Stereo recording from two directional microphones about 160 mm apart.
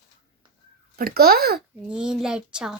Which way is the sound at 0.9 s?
70° right (ahead or behind).